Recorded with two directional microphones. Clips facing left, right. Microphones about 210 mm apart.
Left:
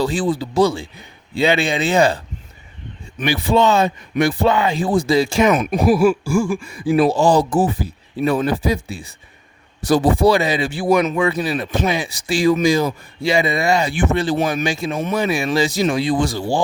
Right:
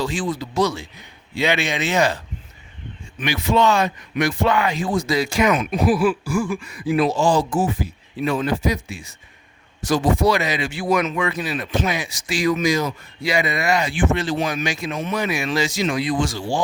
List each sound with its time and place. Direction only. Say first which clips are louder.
0.0 s speech: left 5 dB; 35° left (ahead or behind)